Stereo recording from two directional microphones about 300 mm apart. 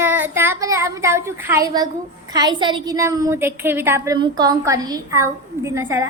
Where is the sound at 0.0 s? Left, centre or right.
Centre.